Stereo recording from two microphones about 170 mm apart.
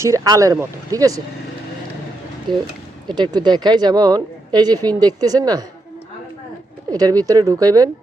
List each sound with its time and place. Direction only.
0.0 s speech: 20° right (ahead or behind)
3.1 s speech: 25° right (ahead or behind)
6.9 s speech: 20° right (ahead or behind)